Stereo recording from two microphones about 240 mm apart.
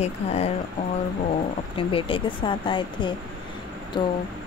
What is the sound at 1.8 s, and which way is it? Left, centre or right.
Speech, left.